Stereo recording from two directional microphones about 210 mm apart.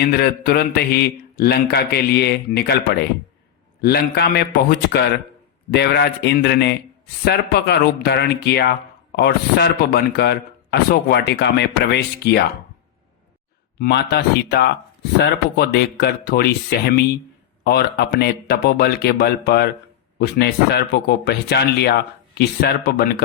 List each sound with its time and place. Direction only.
0.1 s speech: 45° left (ahead or behind)
13.7 s speech: 50° left (ahead or behind)